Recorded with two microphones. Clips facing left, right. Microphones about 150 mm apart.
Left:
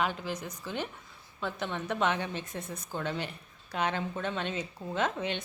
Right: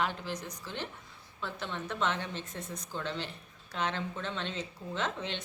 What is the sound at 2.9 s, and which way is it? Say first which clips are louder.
Speech: left 3 dB; 50° left (ahead or behind).